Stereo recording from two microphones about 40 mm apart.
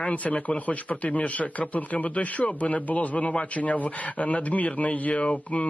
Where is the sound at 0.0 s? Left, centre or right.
Left.